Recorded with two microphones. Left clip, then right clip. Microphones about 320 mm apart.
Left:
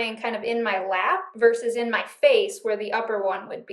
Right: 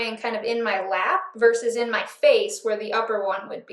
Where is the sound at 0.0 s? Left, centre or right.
Left.